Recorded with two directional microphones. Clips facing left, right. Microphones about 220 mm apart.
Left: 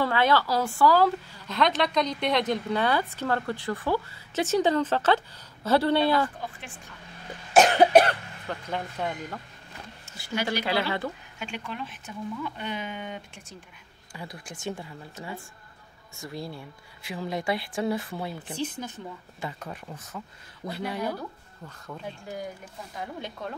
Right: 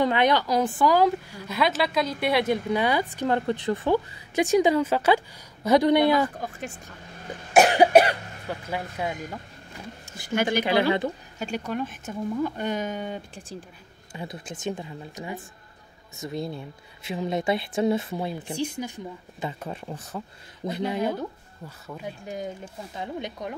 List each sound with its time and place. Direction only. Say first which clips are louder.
0.0 s a woman's voice: right 2 dB; 20° right (ahead or behind)
6.4 s speech: right 5 dB; 45° right (ahead or behind)
7.5 s a woman's voice: right 1 dB; 10° right (ahead or behind)
10.3 s speech: right 5 dB; 50° right (ahead or behind)
10.6 s a woman's voice: right 6 dB; 15° right (ahead or behind)
11.3 s speech: right 7 dB; 40° right (ahead or behind); by 19.5 s 10° right (ahead or behind)
19.6 s speech: right 5 dB; 30° right (ahead or behind)
20.6 s speech: right 5 dB; 20° right (ahead or behind)
21.6 s a woman's voice: right 2 dB; 10° right (ahead or behind)
22.2 s speech: right 3 dB; 20° right (ahead or behind)